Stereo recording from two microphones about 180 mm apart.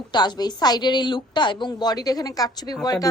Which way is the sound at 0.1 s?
25° left (ahead or behind).